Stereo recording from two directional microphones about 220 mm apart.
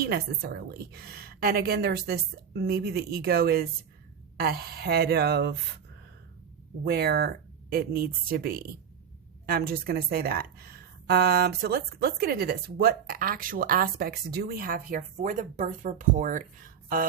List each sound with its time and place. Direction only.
0.0 s a woman's voice: 45° right (ahead or behind)
6.8 s a woman's voice: 45° right (ahead or behind)